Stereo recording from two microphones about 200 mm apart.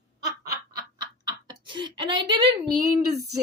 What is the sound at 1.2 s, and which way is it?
Speech, 20° right (ahead or behind).